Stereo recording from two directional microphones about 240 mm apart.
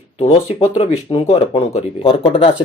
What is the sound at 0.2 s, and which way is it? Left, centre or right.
Speech, left.